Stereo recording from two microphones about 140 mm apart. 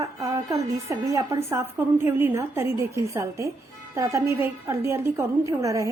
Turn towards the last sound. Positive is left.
turn(degrees=-25)  # may be behind; listen again after turning